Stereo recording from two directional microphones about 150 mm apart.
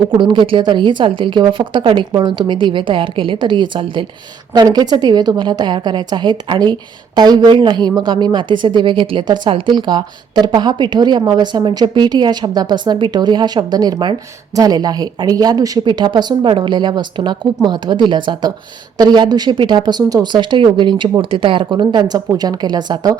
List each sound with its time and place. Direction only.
0.1 s a woman's voice: 30° right (ahead or behind)